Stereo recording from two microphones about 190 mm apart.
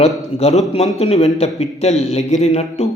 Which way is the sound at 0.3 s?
30° left (ahead or behind).